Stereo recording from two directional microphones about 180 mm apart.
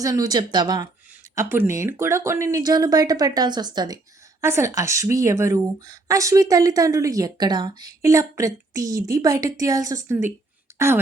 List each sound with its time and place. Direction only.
0.0 s speech: 20° right (ahead or behind)